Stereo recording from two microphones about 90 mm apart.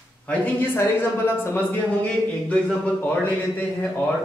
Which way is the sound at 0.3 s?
25° left (ahead or behind).